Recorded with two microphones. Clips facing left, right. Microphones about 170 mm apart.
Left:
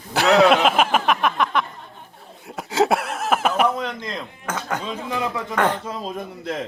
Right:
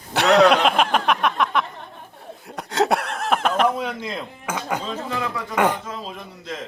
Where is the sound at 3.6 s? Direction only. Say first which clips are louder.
Right 1 dB; 5° right (ahead or behind).